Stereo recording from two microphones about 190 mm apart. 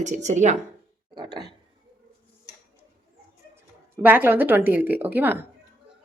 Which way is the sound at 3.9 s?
10° right (ahead or behind).